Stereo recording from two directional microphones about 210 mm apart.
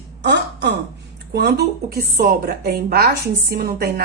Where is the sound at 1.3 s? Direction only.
50° right (ahead or behind).